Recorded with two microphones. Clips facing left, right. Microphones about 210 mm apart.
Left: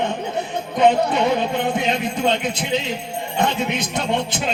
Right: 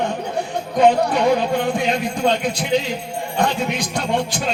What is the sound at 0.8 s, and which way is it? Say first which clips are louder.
Speech: right 1 dB; 20° left (ahead or behind).